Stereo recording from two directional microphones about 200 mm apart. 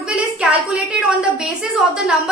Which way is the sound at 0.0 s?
5° right (ahead or behind).